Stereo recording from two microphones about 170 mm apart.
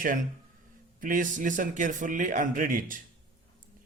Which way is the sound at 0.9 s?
50° right (ahead or behind).